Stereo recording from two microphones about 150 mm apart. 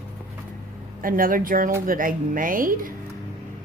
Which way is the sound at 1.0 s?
70° right (ahead or behind).